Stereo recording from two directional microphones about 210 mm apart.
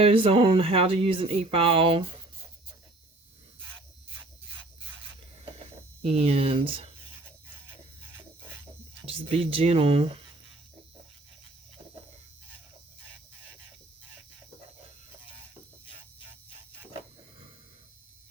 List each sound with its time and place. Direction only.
0.0 s speech: 25° right (ahead or behind)
4.2 s a sound: 10° right (ahead or behind)
6.0 s speech: 30° right (ahead or behind)
8.1 s music: 10° right (ahead or behind)
9.0 s speech: 25° right (ahead or behind)